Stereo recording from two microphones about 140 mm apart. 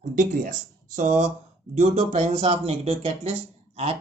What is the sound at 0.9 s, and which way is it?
Speech, 60° right (ahead or behind).